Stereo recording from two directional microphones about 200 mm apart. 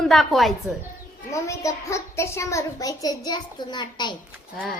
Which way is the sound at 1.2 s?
15° left (ahead or behind).